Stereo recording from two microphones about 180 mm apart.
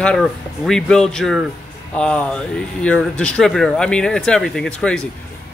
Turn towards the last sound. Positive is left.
turn(degrees=5)  # may be behind; listen again after turning